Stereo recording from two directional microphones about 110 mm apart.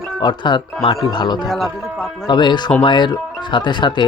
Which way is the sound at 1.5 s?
Centre (ahead or behind).